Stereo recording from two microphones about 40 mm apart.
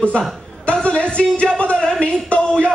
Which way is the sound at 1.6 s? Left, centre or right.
Left.